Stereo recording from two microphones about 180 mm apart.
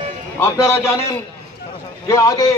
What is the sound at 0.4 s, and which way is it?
A man's voice, 15° left (ahead or behind).